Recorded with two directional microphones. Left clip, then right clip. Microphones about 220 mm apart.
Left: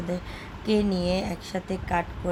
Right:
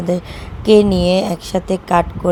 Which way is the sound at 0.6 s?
30° right (ahead or behind).